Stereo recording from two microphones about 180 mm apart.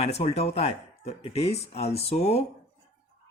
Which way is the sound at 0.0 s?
35° left (ahead or behind).